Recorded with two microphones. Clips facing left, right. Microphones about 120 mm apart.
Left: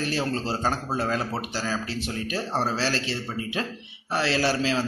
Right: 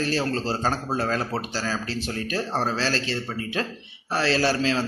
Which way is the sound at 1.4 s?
15° left (ahead or behind).